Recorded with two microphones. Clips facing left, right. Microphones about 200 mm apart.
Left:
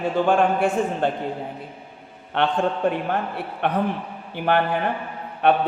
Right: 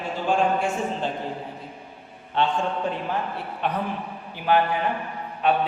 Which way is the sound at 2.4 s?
65° left (ahead or behind).